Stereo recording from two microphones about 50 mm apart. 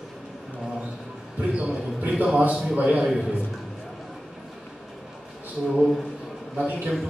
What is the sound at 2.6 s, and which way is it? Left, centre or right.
Speech, right.